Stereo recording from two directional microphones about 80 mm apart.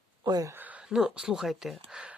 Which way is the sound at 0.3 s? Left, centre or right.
Right.